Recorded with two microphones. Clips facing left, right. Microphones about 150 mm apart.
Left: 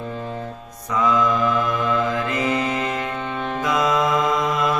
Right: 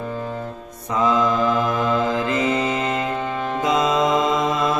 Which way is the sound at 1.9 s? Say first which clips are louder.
Right 2 dB; 25° right (ahead or behind).